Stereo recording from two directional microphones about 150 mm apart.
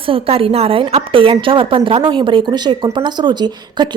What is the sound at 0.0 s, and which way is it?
A woman's voice, 40° right (ahead or behind).